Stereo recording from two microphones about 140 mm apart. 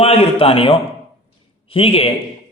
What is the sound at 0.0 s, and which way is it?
A man's voice, 45° left (ahead or behind).